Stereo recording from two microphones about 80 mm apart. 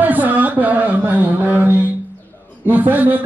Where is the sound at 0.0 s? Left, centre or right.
Right.